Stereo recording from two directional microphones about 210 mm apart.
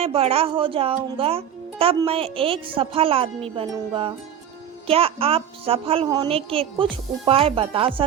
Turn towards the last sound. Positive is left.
turn(degrees=-25)  # may be behind; listen again after turning